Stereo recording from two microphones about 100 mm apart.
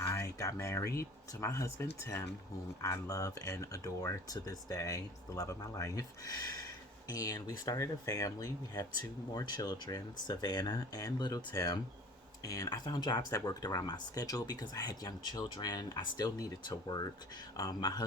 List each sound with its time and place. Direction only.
0.0 s speech: 30° left (ahead or behind); by 18.0 s 50° left (ahead or behind)